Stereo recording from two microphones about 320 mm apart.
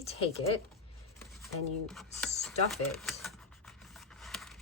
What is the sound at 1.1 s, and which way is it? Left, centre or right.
Speech, centre.